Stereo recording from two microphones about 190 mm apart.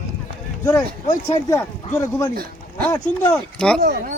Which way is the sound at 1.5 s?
15° left (ahead or behind).